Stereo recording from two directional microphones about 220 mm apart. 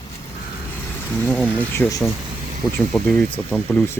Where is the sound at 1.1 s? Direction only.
5° left (ahead or behind).